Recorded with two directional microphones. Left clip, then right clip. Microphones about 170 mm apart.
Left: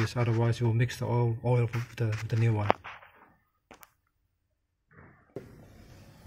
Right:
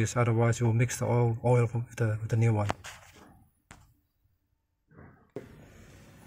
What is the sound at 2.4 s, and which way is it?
Speech, 5° right (ahead or behind).